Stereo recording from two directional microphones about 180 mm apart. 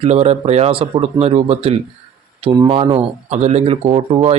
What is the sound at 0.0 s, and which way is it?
Speech, 35° right (ahead or behind).